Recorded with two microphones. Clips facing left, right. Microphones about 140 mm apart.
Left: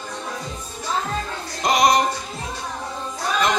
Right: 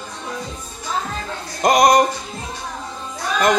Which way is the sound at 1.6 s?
45° right (ahead or behind).